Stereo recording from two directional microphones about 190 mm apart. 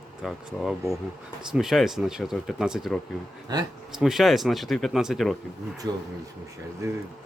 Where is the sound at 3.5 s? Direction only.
20° right (ahead or behind).